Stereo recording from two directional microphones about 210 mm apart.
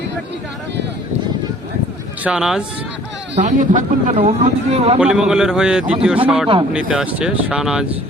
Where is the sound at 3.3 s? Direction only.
35° right (ahead or behind).